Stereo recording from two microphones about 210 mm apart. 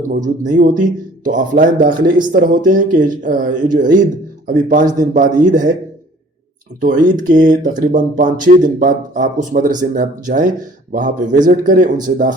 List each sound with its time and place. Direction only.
0.1 s speech: 40° right (ahead or behind)
6.7 s speech: 40° right (ahead or behind)